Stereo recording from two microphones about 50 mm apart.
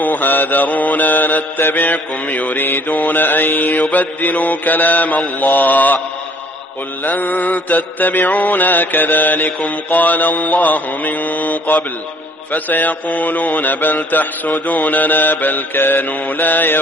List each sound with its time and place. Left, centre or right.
0.0 s mantra: left
7.1 s mantra: left